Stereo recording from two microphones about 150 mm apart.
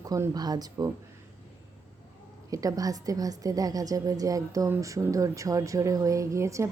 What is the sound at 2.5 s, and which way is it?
A woman's voice, 25° right (ahead or behind).